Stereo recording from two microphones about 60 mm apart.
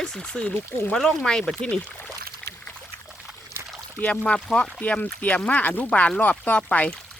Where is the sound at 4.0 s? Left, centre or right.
Centre.